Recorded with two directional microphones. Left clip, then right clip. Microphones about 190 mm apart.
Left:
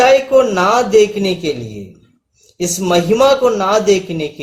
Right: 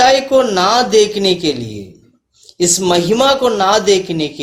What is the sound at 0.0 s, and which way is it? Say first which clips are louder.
A man's voice: left 1 dB; 35° right (ahead or behind).